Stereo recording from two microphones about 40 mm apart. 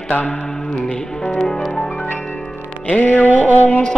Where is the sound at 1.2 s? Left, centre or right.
Centre.